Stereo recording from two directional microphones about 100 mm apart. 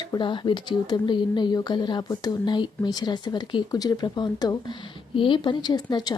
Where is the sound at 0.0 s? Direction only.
45° left (ahead or behind).